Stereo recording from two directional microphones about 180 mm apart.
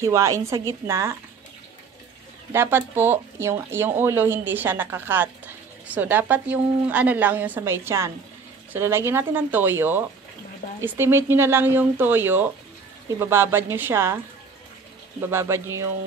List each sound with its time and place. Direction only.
0.0 s speech: 15° right (ahead or behind)
2.5 s speech: 15° right (ahead or behind)